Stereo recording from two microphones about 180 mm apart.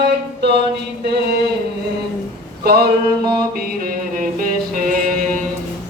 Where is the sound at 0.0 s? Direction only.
70° right (ahead or behind).